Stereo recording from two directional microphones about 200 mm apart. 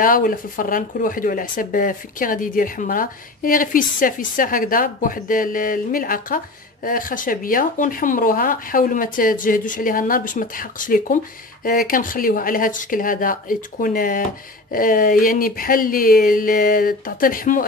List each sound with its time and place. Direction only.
0.0 s speech: 45° left (ahead or behind)